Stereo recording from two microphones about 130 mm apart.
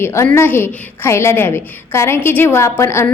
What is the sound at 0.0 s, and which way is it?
A woman's voice, 20° left (ahead or behind).